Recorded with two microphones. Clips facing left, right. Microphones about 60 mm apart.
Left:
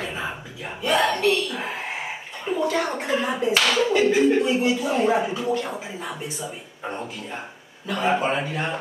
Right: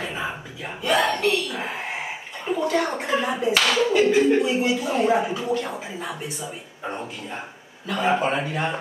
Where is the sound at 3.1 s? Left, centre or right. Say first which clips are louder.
Even; centre.